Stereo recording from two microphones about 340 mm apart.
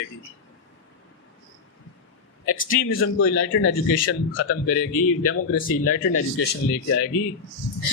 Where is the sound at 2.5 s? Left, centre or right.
Left.